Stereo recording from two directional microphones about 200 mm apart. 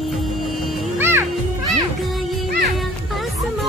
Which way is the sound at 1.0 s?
10° right (ahead or behind).